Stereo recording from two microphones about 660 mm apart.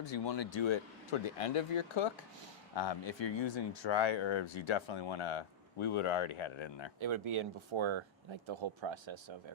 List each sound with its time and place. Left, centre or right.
0.0 s speech: left
7.0 s speech: right